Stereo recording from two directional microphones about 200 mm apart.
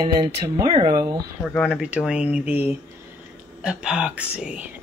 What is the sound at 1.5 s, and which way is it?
Speech, centre (ahead or behind).